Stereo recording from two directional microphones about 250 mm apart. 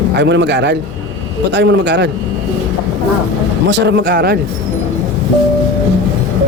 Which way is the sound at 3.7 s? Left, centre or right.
Right.